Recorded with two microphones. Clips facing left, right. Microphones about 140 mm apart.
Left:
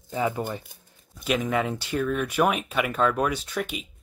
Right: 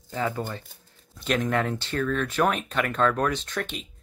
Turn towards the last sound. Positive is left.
turn(degrees=10)  # may be behind; listen again after turning